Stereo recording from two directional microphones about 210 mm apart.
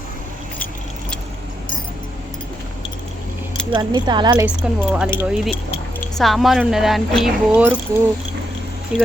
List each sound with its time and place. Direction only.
3.7 s speech: 20° right (ahead or behind)
4.4 s speech: 5° right (ahead or behind)
8.9 s speech: 5° right (ahead or behind)